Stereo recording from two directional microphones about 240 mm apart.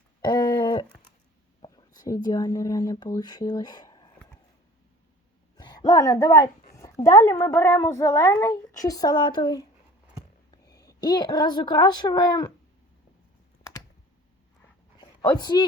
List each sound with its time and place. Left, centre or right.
0.2 s a sound: centre
1.6 s speech: centre
5.5 s a child's voice: centre
14.9 s dog: centre